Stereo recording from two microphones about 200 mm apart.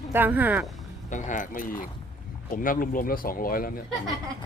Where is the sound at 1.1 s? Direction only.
40° left (ahead or behind).